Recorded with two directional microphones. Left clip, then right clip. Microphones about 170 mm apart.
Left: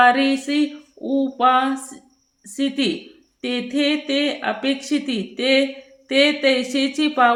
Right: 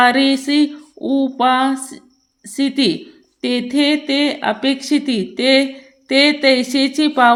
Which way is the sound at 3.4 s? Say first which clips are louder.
Right 5 dB; 30° right (ahead or behind).